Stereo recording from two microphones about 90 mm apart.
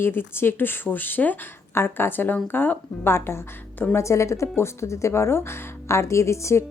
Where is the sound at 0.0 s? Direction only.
25° left (ahead or behind).